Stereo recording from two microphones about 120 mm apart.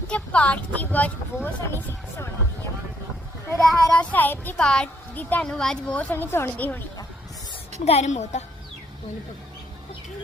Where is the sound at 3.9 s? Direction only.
10° left (ahead or behind).